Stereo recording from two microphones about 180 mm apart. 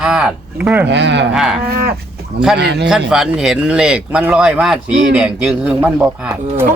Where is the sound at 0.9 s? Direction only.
75° right (ahead or behind).